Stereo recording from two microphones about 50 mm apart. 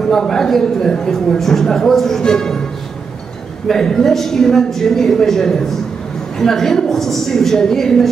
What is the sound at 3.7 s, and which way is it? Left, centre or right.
A man's voice, centre.